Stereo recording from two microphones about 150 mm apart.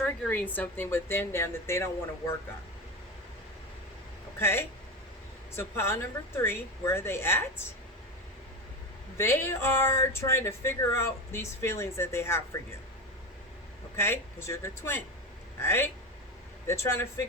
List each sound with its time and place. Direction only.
0.0 s a woman's voice: 10° left (ahead or behind)
4.4 s a woman's voice: 15° left (ahead or behind)
9.1 s a woman's voice: 15° left (ahead or behind)
13.9 s a woman's voice: 15° left (ahead or behind)